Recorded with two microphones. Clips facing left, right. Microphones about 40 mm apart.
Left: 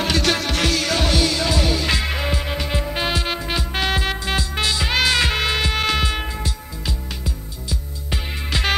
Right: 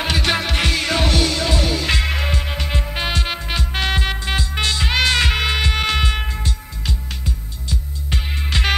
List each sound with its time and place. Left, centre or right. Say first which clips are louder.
0.0 s music: even; centre
8.1 s music: right 1 dB; centre